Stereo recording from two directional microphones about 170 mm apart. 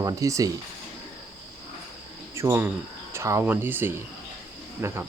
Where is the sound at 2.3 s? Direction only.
15° right (ahead or behind).